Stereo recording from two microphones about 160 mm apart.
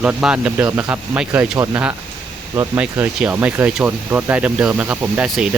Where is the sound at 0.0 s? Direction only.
5° right (ahead or behind).